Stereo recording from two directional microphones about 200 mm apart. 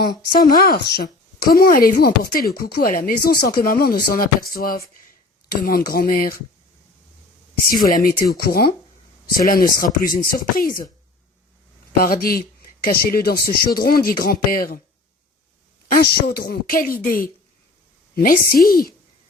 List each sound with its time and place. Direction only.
0.3 s speech: 45° left (ahead or behind)
7.7 s speech: 45° left (ahead or behind)
11.9 s speech: 45° left (ahead or behind)
15.9 s speech: 45° left (ahead or behind)